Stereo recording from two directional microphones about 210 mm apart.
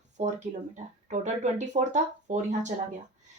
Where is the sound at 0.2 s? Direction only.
35° right (ahead or behind).